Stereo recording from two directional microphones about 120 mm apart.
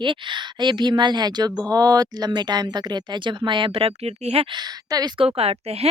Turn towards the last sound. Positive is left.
turn(degrees=-55)  # may be behind; listen again after turning